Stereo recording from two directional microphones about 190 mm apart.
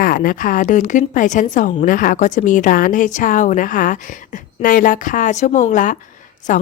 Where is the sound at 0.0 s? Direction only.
50° left (ahead or behind).